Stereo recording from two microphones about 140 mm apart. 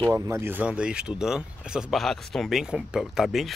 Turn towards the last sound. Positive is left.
turn(degrees=0)  # may be behind; listen again after turning